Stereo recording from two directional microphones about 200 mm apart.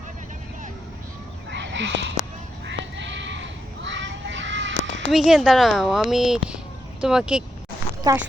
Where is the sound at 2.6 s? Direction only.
65° right (ahead or behind).